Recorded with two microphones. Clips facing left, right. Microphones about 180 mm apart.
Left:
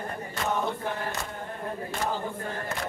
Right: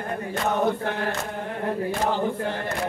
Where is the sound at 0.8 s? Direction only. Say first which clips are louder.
Right 5 dB; 75° right (ahead or behind).